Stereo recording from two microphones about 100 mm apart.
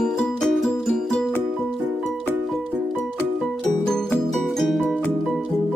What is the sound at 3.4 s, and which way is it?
Music, 5° left (ahead or behind).